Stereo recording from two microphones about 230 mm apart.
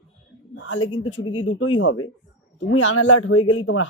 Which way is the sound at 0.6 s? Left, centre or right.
Left.